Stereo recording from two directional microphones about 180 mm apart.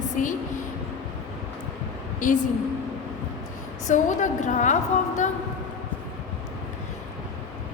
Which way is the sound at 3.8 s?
45° left (ahead or behind).